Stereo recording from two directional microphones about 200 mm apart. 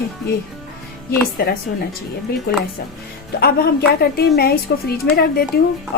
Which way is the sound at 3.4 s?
50° left (ahead or behind).